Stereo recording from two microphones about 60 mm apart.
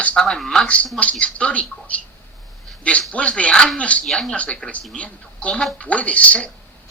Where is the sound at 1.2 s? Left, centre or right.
Centre.